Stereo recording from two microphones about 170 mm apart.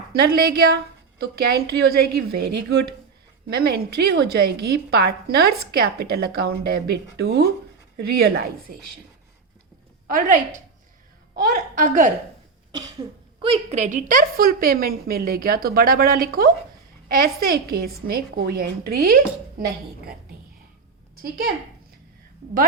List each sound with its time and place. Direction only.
0.1 s a woman's voice: 65° right (ahead or behind)
10.1 s a woman's voice: 50° right (ahead or behind)
13.4 s a woman's voice: 35° right (ahead or behind); by 19.1 s 60° right (ahead or behind)